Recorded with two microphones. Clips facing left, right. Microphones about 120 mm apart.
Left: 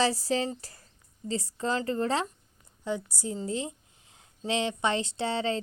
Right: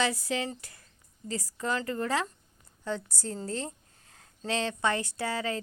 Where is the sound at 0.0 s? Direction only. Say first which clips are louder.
Left 3 dB; 35° left (ahead or behind).